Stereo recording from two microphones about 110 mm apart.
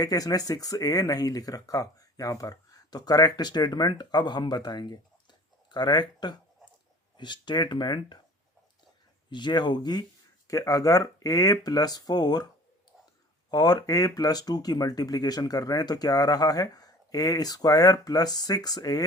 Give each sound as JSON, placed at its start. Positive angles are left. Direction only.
{"t": 0.0, "sound": "speech", "side_deg": 35}
{"t": 9.3, "sound": "speech", "side_deg": 40}
{"t": 13.5, "sound": "speech", "side_deg": 35}